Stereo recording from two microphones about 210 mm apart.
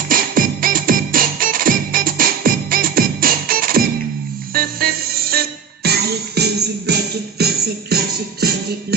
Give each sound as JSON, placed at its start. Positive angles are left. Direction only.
{"t": 0.1, "sound": "music", "side_deg": -40}